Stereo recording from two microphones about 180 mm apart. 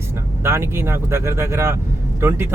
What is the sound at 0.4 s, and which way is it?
Speech, 15° right (ahead or behind).